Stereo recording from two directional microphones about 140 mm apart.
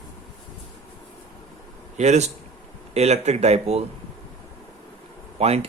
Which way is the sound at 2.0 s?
55° right (ahead or behind).